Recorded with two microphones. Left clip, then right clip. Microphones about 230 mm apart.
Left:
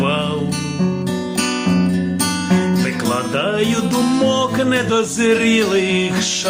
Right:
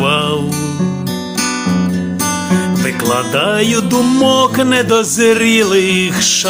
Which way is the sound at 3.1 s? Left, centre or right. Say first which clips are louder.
Right 6 dB; right.